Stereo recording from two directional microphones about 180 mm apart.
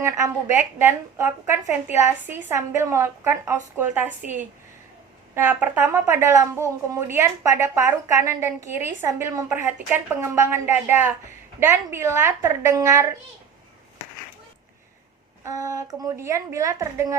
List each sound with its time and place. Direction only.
0.0 s a woman's voice: 15° right (ahead or behind)
15.4 s a woman's voice: 20° right (ahead or behind)